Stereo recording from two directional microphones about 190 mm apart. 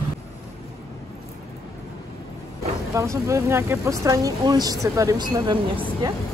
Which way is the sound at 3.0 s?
15° right (ahead or behind).